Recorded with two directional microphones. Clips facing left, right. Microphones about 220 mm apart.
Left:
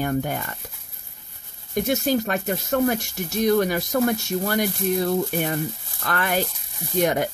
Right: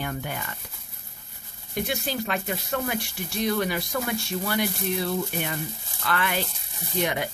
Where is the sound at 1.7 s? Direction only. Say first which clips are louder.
Left 7 dB; 45° left (ahead or behind).